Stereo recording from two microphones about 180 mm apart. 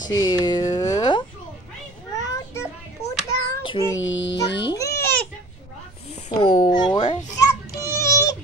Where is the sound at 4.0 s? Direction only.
90° left.